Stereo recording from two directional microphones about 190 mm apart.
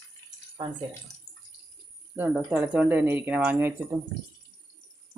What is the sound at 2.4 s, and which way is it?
Speech, 10° right (ahead or behind).